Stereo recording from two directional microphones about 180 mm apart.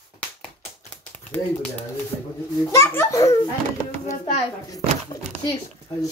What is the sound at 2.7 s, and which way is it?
Speech, 15° left (ahead or behind).